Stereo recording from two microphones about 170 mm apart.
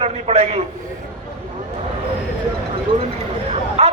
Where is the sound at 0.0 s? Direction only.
40° right (ahead or behind).